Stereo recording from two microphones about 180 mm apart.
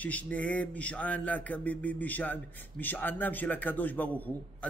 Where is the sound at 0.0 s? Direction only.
10° left (ahead or behind).